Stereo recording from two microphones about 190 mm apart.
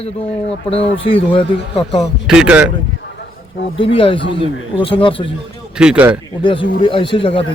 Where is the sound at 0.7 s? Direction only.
30° left (ahead or behind).